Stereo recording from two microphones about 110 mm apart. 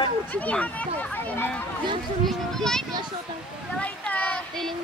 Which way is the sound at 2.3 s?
5° left (ahead or behind).